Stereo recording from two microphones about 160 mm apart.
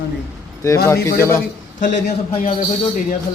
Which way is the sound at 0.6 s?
20° left (ahead or behind).